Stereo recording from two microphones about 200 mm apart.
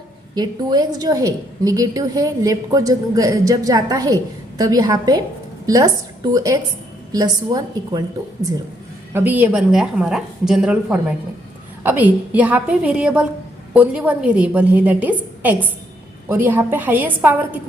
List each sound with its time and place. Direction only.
0.3 s a woman's voice: 20° right (ahead or behind)